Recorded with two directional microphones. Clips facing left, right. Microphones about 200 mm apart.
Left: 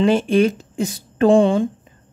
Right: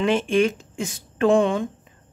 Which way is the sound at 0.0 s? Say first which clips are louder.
Left 4 dB; 35° left (ahead or behind).